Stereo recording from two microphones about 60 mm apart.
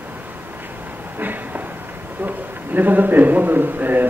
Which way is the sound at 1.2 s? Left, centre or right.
Right.